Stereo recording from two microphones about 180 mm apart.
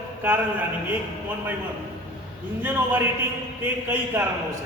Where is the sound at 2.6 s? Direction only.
10° right (ahead or behind).